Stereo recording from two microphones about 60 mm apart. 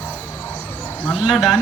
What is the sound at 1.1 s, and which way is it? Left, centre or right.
Speech, centre.